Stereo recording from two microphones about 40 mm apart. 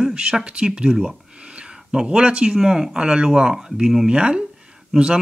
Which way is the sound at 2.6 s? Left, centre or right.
Centre.